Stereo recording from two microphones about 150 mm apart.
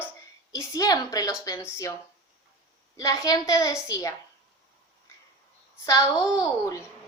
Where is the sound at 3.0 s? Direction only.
20° left (ahead or behind).